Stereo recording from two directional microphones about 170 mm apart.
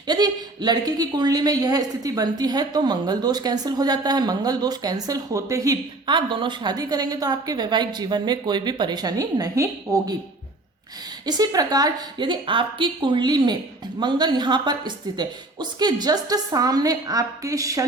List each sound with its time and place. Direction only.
0.1 s a woman's voice: 25° right (ahead or behind)
11.3 s a woman's voice: 20° right (ahead or behind)